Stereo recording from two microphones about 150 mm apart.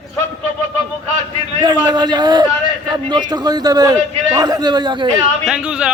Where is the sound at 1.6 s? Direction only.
30° right (ahead or behind).